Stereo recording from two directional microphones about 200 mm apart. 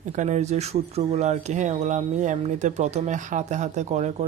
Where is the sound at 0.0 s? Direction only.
40° right (ahead or behind).